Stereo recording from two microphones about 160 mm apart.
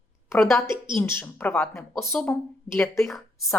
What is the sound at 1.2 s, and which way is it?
Speech, 10° left (ahead or behind).